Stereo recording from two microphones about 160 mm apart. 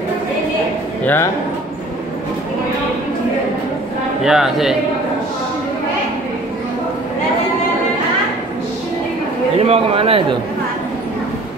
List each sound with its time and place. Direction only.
1.0 s a man's voice: 15° left (ahead or behind)
4.2 s speech: 5° right (ahead or behind)
9.6 s a man's voice: 35° right (ahead or behind)